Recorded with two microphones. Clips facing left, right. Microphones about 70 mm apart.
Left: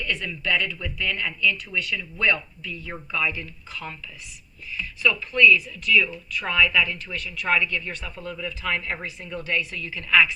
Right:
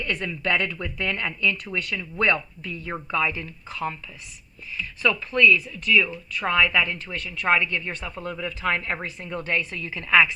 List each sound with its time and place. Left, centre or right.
0.0 s a woman's voice: right
5.0 s a woman's voice: right